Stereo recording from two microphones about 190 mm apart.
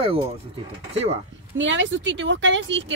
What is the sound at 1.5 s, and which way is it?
Speech, 75° right (ahead or behind).